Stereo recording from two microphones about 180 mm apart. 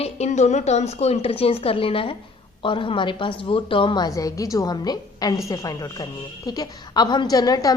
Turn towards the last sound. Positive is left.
turn(degrees=20)  # may be behind; listen again after turning